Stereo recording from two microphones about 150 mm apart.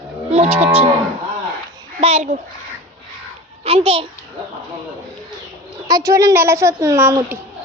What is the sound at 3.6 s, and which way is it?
Speech, 40° right (ahead or behind).